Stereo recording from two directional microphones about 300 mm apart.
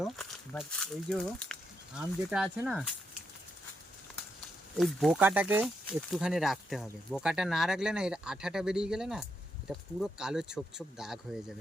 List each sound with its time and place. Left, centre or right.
0.0 s speech: centre
4.8 s speech: centre